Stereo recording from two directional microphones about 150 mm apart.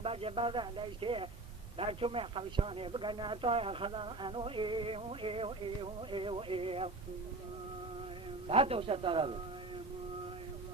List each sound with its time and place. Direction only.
0.0 s speech: 40° right (ahead or behind)
8.4 s speech: 40° right (ahead or behind)